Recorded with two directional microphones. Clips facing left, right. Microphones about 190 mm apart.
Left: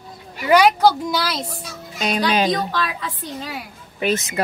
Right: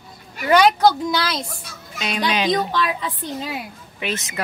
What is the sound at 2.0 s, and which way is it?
Fowl, 40° left (ahead or behind).